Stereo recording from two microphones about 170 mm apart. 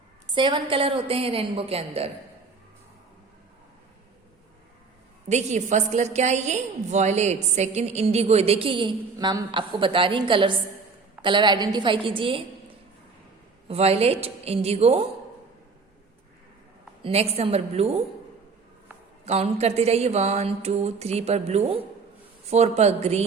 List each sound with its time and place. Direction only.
0.3 s speech: 30° right (ahead or behind)
5.3 s a woman's voice: 40° right (ahead or behind)
13.7 s speech: 35° right (ahead or behind)
17.0 s speech: 35° right (ahead or behind)
19.2 s speech: 40° right (ahead or behind)